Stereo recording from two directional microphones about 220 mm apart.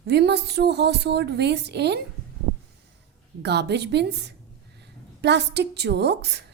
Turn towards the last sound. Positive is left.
turn(degrees=-50)  # may be behind; listen again after turning